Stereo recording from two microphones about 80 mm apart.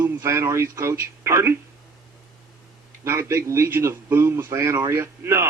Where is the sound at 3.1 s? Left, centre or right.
Right.